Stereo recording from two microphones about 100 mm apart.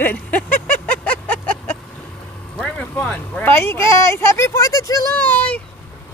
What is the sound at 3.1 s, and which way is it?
Speech, 20° left (ahead or behind).